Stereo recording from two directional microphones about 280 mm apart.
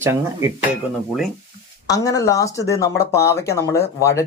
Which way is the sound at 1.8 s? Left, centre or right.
Centre.